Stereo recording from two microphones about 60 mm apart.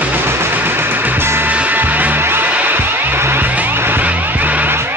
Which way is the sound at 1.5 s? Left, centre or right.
Right.